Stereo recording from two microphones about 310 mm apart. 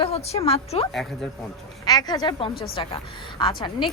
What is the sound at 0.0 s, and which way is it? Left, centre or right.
A woman's voice, centre.